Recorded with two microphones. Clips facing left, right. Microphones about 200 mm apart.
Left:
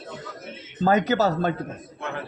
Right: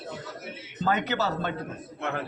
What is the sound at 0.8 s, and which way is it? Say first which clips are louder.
Speech: left 7 dB; 40° left (ahead or behind).